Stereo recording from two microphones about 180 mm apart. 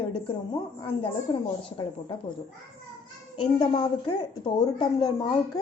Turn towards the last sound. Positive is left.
turn(degrees=25)  # may be behind; listen again after turning